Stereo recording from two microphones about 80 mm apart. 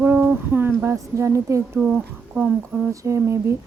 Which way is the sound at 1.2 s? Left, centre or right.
Right.